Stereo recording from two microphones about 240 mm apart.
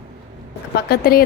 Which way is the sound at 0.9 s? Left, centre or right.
Left.